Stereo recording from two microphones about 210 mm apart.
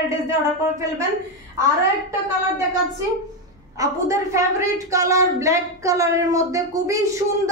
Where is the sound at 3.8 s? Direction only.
15° right (ahead or behind).